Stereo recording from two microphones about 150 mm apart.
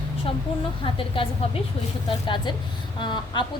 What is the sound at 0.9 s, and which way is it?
A woman's voice, 35° left (ahead or behind).